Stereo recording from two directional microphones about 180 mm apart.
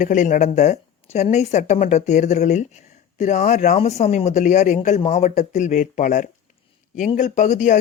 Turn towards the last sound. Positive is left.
turn(degrees=40)  # may be behind; listen again after turning